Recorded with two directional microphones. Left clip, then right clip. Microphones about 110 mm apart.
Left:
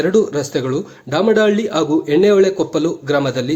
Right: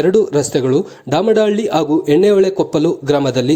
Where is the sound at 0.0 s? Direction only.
40° right (ahead or behind).